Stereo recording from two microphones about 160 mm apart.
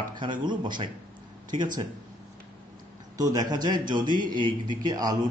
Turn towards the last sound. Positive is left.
turn(degrees=-25)  # may be behind; listen again after turning